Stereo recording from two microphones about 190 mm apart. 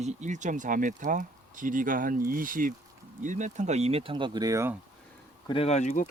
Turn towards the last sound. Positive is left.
turn(degrees=40)  # may be behind; listen again after turning